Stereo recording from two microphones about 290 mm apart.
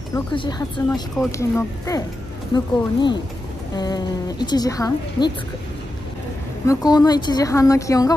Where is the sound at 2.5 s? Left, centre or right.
Centre.